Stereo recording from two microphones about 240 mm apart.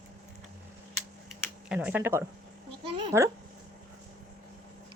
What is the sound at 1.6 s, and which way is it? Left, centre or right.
Speech, centre.